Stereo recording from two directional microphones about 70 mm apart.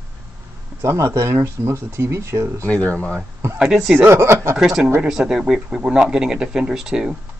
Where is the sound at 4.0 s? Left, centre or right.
Right.